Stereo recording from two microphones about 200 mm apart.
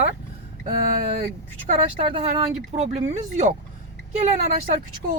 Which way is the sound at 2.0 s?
30° right (ahead or behind).